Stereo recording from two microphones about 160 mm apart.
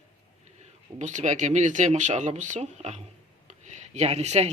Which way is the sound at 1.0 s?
50° right (ahead or behind).